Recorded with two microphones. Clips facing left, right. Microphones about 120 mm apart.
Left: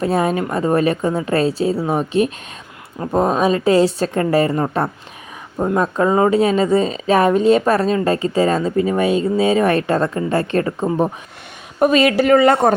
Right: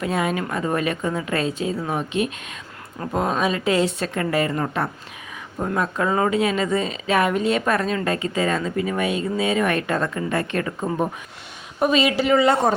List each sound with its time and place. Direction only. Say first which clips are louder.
0.0 s a woman's voice: left 6 dB; 35° left (ahead or behind)
11.8 s a woman's voice: left 5 dB; 50° left (ahead or behind)